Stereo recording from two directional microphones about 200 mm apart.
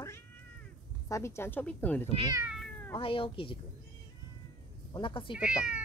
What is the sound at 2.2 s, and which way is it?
Speech, 15° right (ahead or behind).